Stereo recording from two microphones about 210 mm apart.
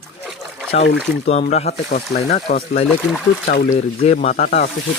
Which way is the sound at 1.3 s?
35° left (ahead or behind).